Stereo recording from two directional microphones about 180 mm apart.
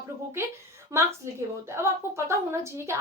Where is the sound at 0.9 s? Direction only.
15° right (ahead or behind).